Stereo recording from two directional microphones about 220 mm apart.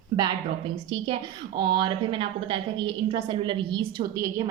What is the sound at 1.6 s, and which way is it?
A woman's voice, 20° right (ahead or behind).